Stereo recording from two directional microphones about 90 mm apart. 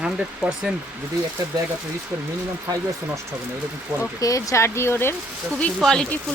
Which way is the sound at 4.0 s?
40° left (ahead or behind).